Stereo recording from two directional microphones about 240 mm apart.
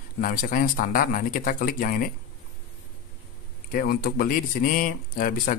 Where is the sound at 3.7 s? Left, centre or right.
Left.